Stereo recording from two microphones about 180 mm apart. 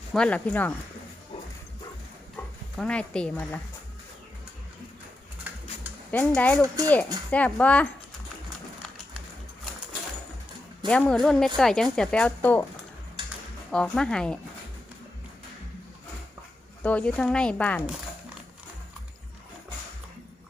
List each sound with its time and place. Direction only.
0.1 s speech: 5° left (ahead or behind)
2.3 s speech: 5° left (ahead or behind)
5.5 s pigeon: 10° right (ahead or behind)
6.1 s speech: 10° left (ahead or behind)
6.6 s speech: 20° right (ahead or behind)
7.3 s speech: 10° left (ahead or behind)
10.8 s a woman's voice: 5° left (ahead or behind)
13.7 s a woman's voice: centre (ahead or behind)
16.8 s speech: 10° left (ahead or behind)